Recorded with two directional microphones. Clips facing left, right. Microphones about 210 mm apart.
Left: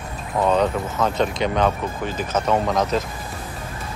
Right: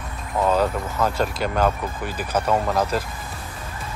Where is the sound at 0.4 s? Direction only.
5° right (ahead or behind).